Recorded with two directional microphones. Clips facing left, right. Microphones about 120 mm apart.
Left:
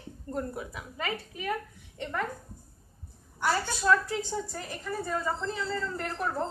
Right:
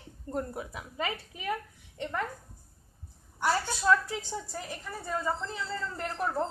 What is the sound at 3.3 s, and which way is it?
A woman's voice, 15° right (ahead or behind).